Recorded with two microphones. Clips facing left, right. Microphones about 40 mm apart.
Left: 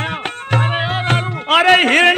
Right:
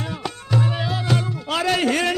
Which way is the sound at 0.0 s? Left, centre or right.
Left.